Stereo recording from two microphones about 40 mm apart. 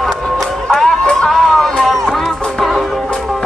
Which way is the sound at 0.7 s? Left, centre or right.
Centre.